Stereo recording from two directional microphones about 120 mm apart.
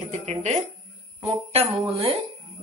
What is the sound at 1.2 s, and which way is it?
Jingle bell, 60° right (ahead or behind).